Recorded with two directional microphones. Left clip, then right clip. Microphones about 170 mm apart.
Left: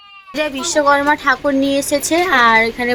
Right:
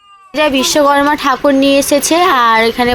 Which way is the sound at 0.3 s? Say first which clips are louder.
Right 6 dB; 20° right (ahead or behind).